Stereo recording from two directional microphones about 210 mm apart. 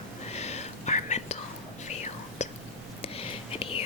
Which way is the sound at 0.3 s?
30° left (ahead or behind).